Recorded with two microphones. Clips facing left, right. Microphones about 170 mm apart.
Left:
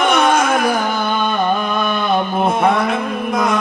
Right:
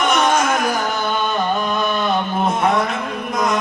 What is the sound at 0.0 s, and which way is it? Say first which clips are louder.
Carnatic music: left 2 dB; 55° left (ahead or behind).